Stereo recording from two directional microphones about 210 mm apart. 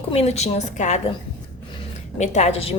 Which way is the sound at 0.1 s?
30° left (ahead or behind).